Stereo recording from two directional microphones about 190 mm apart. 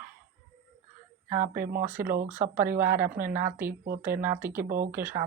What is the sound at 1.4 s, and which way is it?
Speech, 50° right (ahead or behind).